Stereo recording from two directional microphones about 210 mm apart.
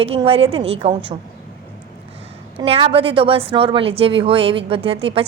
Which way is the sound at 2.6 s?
25° right (ahead or behind).